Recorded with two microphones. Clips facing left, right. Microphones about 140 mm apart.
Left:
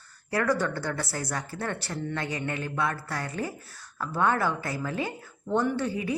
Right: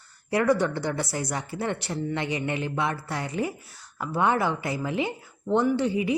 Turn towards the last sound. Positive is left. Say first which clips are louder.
# right 5 dB
turn(degrees=-20)  # may be behind; listen again after turning